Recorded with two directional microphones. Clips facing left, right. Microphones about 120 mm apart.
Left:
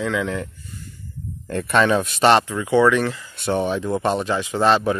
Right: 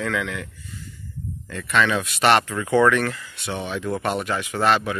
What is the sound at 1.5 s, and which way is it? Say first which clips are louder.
Speech: left 4 dB; 45° left (ahead or behind).